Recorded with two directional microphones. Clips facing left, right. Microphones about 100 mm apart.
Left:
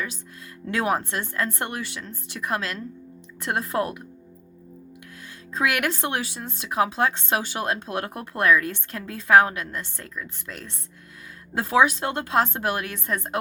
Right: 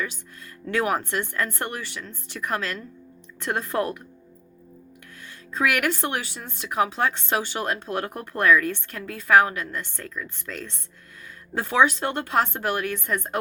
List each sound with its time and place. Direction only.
0.7 s speech: 20° left (ahead or behind)
5.5 s speech: 20° left (ahead or behind)